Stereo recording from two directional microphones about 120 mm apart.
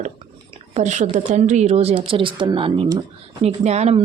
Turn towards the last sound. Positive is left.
turn(degrees=-65)  # may be behind; listen again after turning